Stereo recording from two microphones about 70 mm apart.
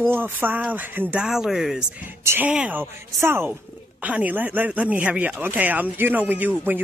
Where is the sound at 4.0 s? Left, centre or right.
Right.